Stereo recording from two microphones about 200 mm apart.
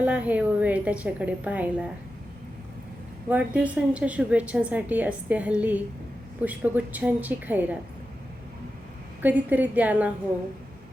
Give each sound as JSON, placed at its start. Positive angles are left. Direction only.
{"t": 0.0, "sound": "speech", "side_deg": -5}
{"t": 3.2, "sound": "a woman's voice", "side_deg": -5}
{"t": 9.2, "sound": "a woman's voice", "side_deg": -10}